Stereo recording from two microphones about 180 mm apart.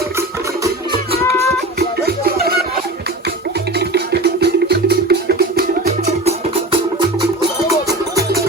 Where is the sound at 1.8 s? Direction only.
60° right (ahead or behind).